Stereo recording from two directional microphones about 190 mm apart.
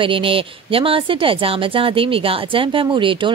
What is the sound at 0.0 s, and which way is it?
Speech, 25° right (ahead or behind).